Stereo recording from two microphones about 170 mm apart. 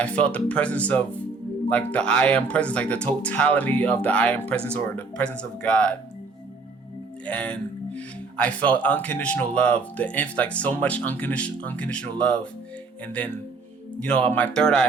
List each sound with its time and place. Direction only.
0.0 s speech: 10° left (ahead or behind)
7.3 s speech: 5° left (ahead or behind)
14.0 s speech: 5° left (ahead or behind)